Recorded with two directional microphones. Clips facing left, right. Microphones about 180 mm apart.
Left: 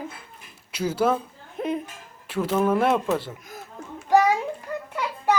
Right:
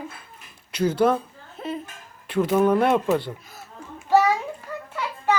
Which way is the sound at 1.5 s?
15° left (ahead or behind).